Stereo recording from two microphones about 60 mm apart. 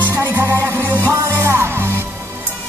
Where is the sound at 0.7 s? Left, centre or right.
Right.